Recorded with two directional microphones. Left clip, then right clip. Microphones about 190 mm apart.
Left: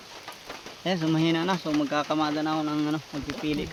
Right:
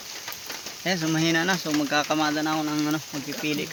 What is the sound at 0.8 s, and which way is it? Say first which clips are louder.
Speech: right 1 dB; 10° left (ahead or behind).